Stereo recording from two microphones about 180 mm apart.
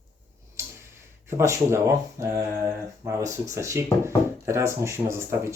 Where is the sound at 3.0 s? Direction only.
15° right (ahead or behind).